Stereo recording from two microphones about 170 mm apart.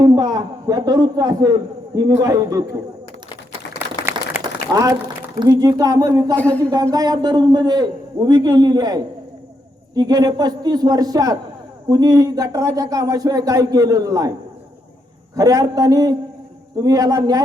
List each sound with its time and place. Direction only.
0.0 s a man's voice: 20° right (ahead or behind)
4.1 s a sound: 15° right (ahead or behind)
4.7 s speech: 20° right (ahead or behind)
6.3 s speech: 10° left (ahead or behind)
6.9 s speech: 25° right (ahead or behind)
15.4 s speech: 20° right (ahead or behind)